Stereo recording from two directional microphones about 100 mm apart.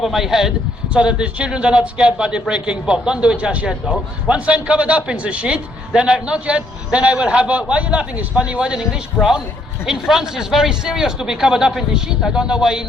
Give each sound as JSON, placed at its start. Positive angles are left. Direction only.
{"t": 0.0, "sound": "a man's voice", "side_deg": -5}